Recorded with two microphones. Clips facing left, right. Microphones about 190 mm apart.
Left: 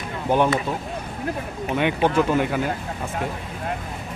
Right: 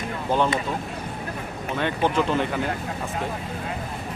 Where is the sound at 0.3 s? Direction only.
15° left (ahead or behind).